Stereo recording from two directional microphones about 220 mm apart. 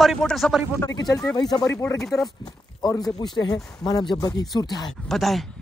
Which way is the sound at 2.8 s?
15° left (ahead or behind).